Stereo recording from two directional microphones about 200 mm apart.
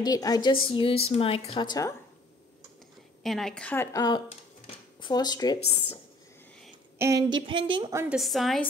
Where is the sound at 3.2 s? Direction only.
Centre (ahead or behind); by 5.5 s 20° left (ahead or behind).